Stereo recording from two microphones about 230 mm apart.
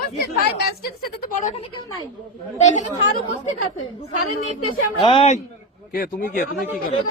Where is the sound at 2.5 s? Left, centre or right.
Left.